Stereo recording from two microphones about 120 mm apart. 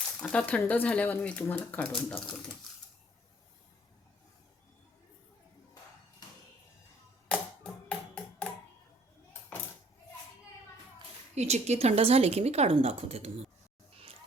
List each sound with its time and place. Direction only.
0.2 s speech: 10° left (ahead or behind)
7.3 s music: 10° left (ahead or behind)
11.3 s speech: 65° right (ahead or behind)